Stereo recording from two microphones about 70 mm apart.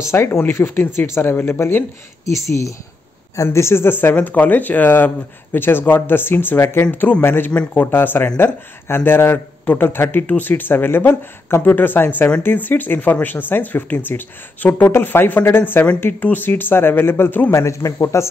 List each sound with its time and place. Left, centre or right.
0.1 s speech: left
3.4 s speech: left
6.8 s speech: left
17.5 s a man's voice: left